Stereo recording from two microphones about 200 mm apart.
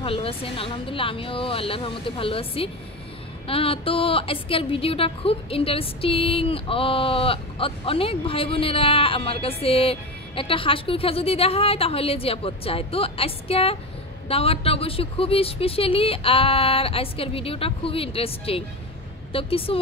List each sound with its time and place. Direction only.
0.0 s a woman's voice: 25° left (ahead or behind)